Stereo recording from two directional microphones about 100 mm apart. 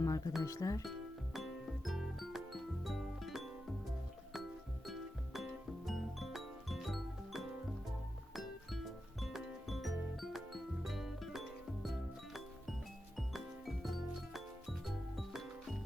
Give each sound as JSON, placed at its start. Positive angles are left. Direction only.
{"t": 0.0, "sound": "music", "side_deg": 35}
{"t": 0.4, "sound": "speech", "side_deg": 35}
{"t": 0.9, "sound": "music", "side_deg": 0}
{"t": 4.9, "sound": "music", "side_deg": 0}